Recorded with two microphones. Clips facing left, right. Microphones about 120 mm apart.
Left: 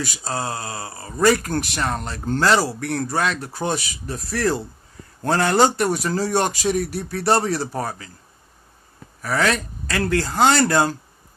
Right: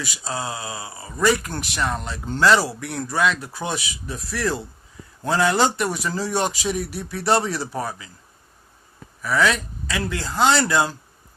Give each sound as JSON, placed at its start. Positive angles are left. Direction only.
{"t": 0.0, "sound": "speech", "side_deg": 45}
{"t": 9.2, "sound": "speech", "side_deg": 45}